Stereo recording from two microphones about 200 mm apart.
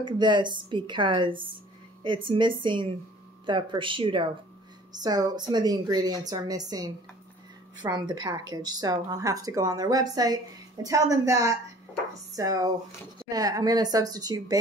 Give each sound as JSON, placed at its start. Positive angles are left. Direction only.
{"t": 0.0, "sound": "a woman's voice", "side_deg": -20}